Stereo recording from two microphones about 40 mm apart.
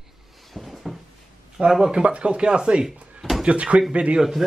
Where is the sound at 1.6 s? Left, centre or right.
Right.